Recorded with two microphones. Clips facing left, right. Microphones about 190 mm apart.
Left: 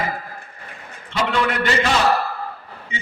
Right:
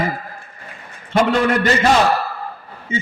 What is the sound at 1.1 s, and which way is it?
Speech, 45° right (ahead or behind).